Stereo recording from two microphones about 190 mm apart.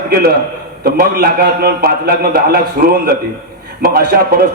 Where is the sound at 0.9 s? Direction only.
50° right (ahead or behind).